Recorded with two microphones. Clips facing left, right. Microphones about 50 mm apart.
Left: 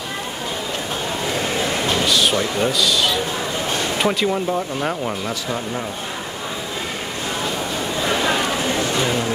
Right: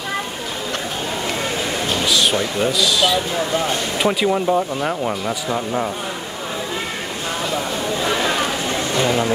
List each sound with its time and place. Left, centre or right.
2.0 s speech: centre